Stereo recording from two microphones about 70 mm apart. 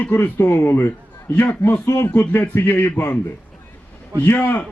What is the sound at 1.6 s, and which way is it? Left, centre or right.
A man's voice, left.